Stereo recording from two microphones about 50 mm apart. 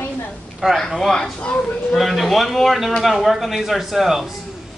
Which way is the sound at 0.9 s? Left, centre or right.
Centre.